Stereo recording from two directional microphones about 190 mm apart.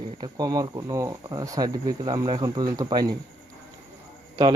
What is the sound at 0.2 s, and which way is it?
A man's voice, 20° right (ahead or behind).